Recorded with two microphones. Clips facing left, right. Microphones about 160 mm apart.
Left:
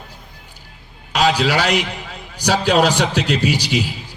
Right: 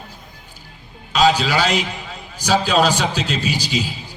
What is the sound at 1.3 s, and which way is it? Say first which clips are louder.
A man's voice: left 1 dB; 65° left (ahead or behind).